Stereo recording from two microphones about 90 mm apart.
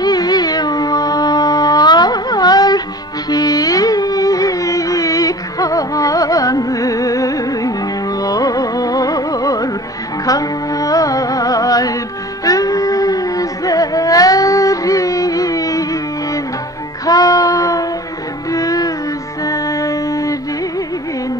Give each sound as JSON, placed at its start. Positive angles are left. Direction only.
{"t": 0.0, "sound": "music", "side_deg": 45}
{"t": 17.0, "sound": "child singing", "side_deg": 40}
{"t": 18.5, "sound": "music", "side_deg": 40}